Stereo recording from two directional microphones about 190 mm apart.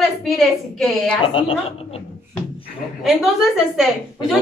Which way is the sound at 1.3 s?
30° left (ahead or behind).